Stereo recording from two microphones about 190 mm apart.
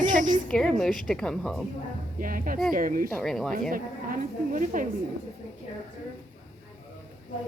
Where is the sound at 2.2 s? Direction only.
45° right (ahead or behind).